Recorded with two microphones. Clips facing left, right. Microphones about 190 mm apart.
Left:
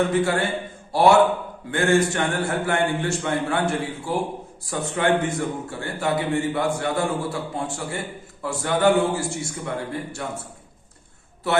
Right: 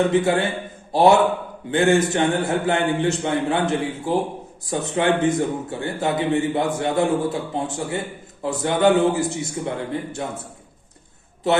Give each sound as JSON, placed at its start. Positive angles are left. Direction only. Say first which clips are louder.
{"t": 0.1, "sound": "a man's voice", "louder": "right 2 dB", "side_deg": -20}
{"t": 11.4, "sound": "a man's voice", "louder": "right 2 dB", "side_deg": -20}